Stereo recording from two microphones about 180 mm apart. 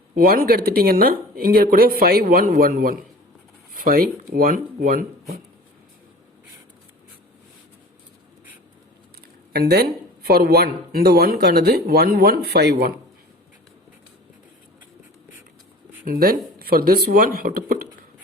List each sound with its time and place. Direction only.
0.2 s speech: 55° right (ahead or behind)
9.5 s speech: 60° right (ahead or behind)
16.0 s speech: 55° right (ahead or behind)